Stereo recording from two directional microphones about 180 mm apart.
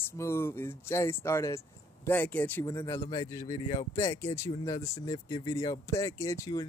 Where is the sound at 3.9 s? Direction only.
15° left (ahead or behind).